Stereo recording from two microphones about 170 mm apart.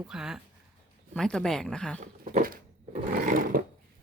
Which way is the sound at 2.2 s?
55° right (ahead or behind).